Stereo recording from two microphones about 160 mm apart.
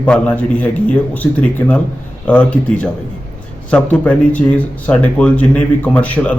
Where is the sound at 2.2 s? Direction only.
10° left (ahead or behind).